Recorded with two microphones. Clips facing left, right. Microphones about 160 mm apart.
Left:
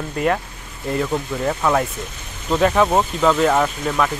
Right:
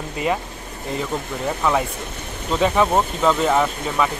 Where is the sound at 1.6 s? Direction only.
5° left (ahead or behind).